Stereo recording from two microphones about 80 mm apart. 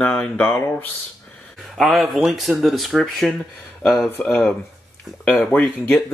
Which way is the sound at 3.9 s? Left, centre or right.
Left.